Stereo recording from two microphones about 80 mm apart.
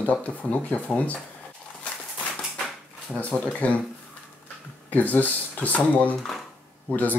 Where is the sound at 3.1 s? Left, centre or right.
Centre.